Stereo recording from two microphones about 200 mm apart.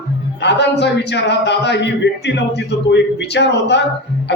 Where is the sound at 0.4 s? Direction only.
60° left (ahead or behind).